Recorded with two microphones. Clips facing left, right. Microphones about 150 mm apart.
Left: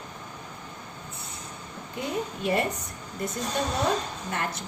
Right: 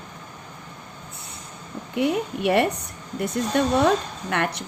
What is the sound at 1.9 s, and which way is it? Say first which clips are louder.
Speech: right 8 dB; 70° right (ahead or behind).